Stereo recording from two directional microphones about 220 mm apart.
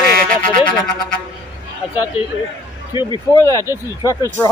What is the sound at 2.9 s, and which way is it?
Speech, 20° left (ahead or behind).